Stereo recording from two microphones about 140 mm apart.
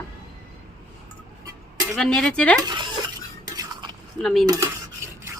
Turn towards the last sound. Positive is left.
turn(degrees=5)  # may be behind; listen again after turning